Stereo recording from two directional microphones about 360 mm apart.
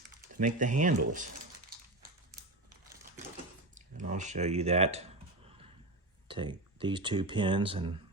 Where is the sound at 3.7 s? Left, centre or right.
Right.